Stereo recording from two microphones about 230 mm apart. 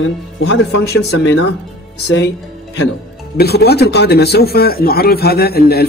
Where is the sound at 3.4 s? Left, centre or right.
Left.